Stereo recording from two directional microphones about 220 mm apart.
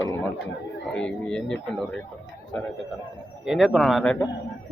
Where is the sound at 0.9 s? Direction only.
5° left (ahead or behind).